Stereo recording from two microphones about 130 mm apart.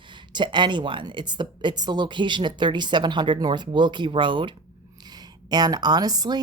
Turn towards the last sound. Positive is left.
turn(degrees=-30)  # may be behind; listen again after turning